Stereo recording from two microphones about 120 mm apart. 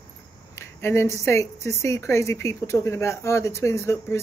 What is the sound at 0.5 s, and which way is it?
A woman's voice, 20° left (ahead or behind).